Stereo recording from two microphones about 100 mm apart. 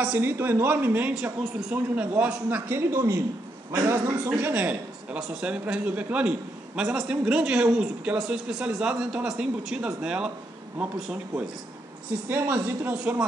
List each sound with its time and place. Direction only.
0.0 s a man's voice: 20° right (ahead or behind)